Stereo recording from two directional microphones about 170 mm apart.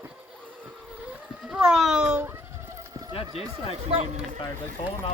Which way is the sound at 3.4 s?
35° left (ahead or behind).